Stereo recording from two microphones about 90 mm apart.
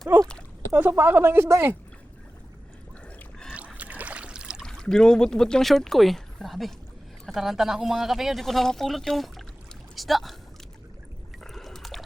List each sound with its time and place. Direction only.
0.1 s speech: 20° right (ahead or behind)
3.8 s boat: 15° right (ahead or behind)
4.6 s speech: 10° left (ahead or behind)
11.4 s a sound: centre (ahead or behind)